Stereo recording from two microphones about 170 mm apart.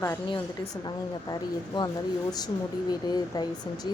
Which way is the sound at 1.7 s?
25° left (ahead or behind).